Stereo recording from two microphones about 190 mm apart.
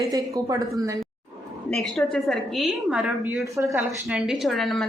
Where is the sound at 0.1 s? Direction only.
20° right (ahead or behind).